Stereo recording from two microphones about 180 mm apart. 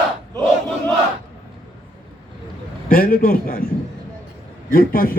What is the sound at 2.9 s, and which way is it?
Speech, 50° left (ahead or behind).